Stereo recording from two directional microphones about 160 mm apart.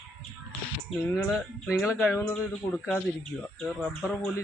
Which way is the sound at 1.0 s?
Centre (ahead or behind).